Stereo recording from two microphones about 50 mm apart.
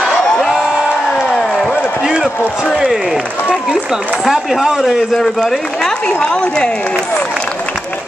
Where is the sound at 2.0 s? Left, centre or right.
Centre.